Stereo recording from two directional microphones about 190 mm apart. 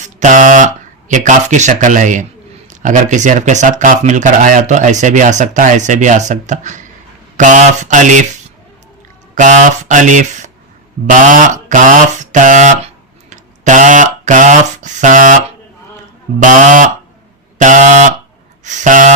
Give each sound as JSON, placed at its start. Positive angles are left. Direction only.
{"t": 0.0, "sound": "speech", "side_deg": -40}
{"t": 9.3, "sound": "speech", "side_deg": -40}
{"t": 13.3, "sound": "a sound", "side_deg": -40}
{"t": 16.4, "sound": "speech", "side_deg": -40}